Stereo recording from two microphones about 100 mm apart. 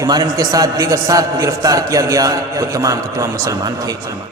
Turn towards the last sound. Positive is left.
turn(degrees=-35)  # may be behind; listen again after turning